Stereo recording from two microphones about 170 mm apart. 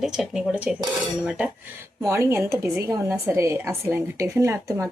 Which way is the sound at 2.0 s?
15° right (ahead or behind).